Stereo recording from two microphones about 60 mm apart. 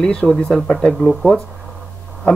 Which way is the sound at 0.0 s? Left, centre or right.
Centre.